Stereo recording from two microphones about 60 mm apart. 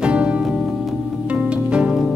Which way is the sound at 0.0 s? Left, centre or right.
Centre.